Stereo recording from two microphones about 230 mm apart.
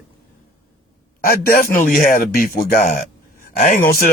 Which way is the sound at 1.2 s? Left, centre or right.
Left.